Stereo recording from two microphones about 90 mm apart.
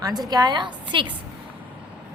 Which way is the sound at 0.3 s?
50° right (ahead or behind).